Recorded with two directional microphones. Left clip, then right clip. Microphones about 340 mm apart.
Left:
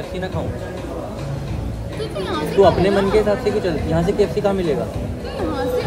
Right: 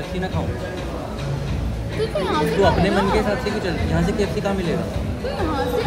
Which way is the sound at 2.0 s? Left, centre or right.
Centre.